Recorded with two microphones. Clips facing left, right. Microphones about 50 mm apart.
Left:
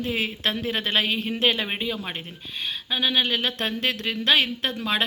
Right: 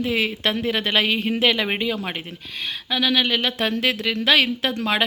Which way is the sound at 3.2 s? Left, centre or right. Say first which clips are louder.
Right 4 dB; right.